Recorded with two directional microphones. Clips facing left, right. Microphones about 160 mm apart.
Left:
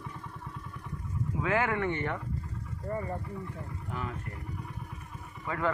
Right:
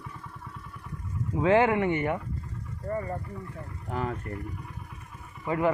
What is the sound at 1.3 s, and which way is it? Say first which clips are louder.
Speech: right 8 dB; 25° right (ahead or behind).